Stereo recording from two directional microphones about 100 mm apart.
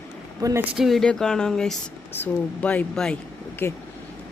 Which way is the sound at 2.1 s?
15° left (ahead or behind).